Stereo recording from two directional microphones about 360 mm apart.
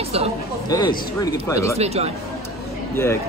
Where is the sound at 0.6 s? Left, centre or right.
Centre.